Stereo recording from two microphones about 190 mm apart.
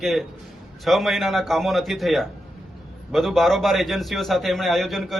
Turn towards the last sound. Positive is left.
turn(degrees=0)  # may be behind; listen again after turning